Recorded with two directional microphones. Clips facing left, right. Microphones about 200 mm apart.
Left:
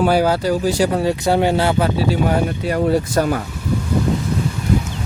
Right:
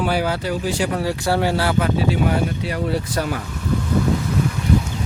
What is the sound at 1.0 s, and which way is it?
Speech, 20° left (ahead or behind).